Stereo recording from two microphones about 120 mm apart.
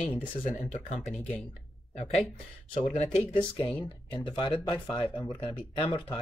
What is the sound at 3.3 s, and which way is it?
Speech, 40° left (ahead or behind).